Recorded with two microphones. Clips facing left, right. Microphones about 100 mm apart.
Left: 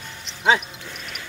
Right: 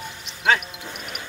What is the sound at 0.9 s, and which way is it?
Music, 15° right (ahead or behind).